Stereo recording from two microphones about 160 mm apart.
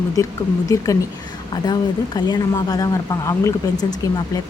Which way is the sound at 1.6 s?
25° left (ahead or behind).